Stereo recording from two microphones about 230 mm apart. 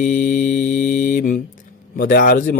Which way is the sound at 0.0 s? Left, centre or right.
Left.